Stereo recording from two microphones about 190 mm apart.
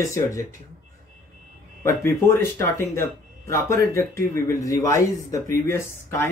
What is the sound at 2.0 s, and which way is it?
Speech, 15° left (ahead or behind).